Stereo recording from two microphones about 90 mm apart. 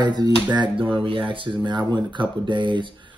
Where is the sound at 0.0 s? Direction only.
55° right (ahead or behind).